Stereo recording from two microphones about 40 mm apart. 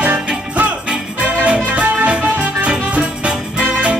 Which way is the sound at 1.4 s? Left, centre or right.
Right.